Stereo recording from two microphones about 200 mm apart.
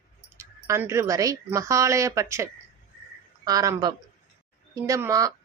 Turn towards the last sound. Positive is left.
turn(degrees=-15)  # may be behind; listen again after turning